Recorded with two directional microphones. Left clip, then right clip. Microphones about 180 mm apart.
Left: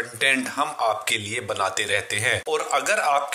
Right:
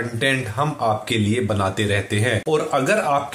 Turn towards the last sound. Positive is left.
turn(degrees=35)  # may be behind; listen again after turning